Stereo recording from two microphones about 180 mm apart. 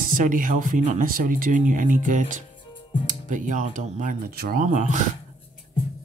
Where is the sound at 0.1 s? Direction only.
50° right (ahead or behind).